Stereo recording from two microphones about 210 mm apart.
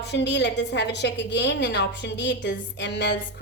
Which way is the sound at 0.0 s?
55° left (ahead or behind).